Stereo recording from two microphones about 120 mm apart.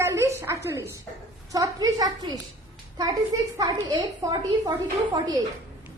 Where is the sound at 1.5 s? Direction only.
30° right (ahead or behind).